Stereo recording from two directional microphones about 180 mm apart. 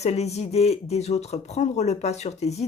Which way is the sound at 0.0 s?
35° left (ahead or behind).